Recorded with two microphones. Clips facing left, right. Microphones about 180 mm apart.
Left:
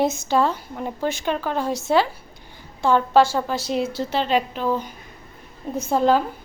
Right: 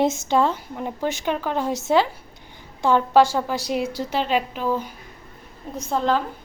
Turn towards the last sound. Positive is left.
turn(degrees=10)  # may be behind; listen again after turning